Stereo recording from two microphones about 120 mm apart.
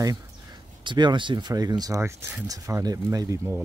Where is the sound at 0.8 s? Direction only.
40° right (ahead or behind).